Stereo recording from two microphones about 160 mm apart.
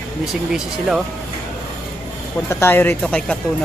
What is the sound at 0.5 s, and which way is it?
Speech, centre (ahead or behind).